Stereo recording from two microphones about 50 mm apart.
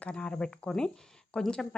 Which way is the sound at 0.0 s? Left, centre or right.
Centre.